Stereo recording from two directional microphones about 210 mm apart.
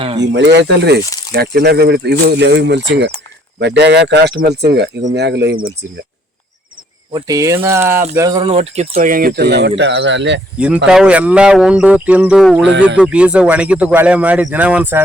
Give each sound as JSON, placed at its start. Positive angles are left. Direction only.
{"t": 0.0, "sound": "speech", "side_deg": -25}
{"t": 0.3, "sound": "speech", "side_deg": -55}
{"t": 7.1, "sound": "speech", "side_deg": -15}
{"t": 8.5, "sound": "speech", "side_deg": -30}
{"t": 10.9, "sound": "speech", "side_deg": -5}